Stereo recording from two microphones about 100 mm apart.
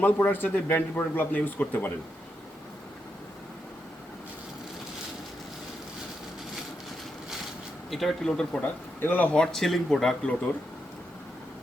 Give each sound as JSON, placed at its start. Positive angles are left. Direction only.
{"t": 0.0, "sound": "speech", "side_deg": 20}
{"t": 7.9, "sound": "speech", "side_deg": 0}